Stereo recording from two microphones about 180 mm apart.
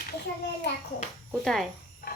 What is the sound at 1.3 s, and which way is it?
Speech, centre (ahead or behind).